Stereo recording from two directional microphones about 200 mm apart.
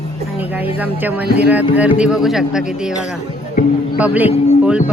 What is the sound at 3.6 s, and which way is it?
Speech, 40° left (ahead or behind).